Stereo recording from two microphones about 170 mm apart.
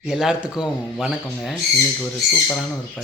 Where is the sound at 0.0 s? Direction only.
5° right (ahead or behind).